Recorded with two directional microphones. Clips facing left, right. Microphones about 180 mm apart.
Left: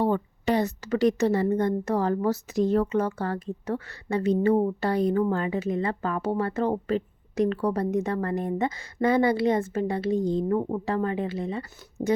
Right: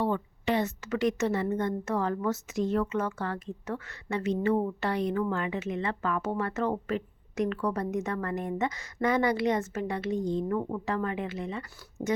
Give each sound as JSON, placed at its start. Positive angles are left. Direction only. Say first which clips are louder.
{"t": 0.0, "sound": "a woman's voice", "louder": "left 4 dB", "side_deg": 40}